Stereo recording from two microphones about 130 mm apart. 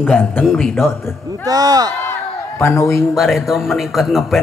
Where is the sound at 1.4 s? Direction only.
30° right (ahead or behind).